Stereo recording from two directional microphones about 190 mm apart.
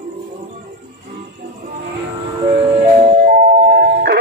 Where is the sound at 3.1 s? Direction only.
50° right (ahead or behind).